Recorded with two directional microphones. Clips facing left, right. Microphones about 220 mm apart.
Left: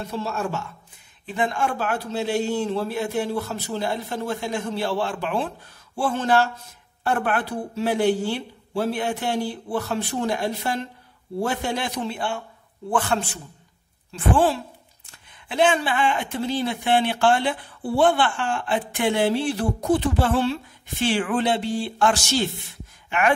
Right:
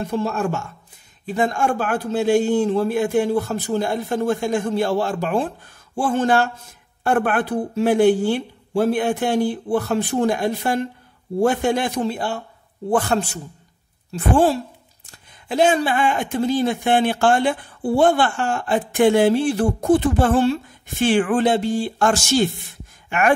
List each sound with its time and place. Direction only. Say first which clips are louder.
0.0 s a man's voice: right 5 dB; 50° right (ahead or behind)